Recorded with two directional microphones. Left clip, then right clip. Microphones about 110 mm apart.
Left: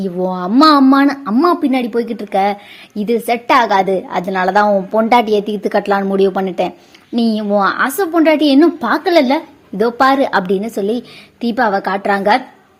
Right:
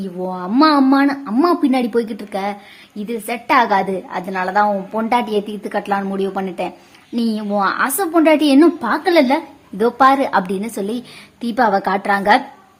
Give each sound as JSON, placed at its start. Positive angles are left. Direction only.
{"t": 0.0, "sound": "a woman's voice", "side_deg": 35}
{"t": 1.4, "sound": "a woman's voice", "side_deg": 30}
{"t": 2.9, "sound": "a woman's voice", "side_deg": 60}
{"t": 3.2, "sound": "a woman's voice", "side_deg": 35}
{"t": 7.2, "sound": "a child's voice", "side_deg": 30}
{"t": 8.6, "sound": "a woman's voice", "side_deg": 25}